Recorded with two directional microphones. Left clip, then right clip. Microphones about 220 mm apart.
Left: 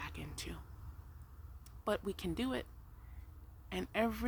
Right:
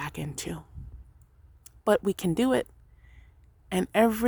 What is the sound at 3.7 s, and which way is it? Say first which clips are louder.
Speech: right 13 dB; 50° right (ahead or behind).